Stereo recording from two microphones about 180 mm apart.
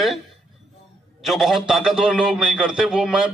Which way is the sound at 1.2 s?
Centre (ahead or behind).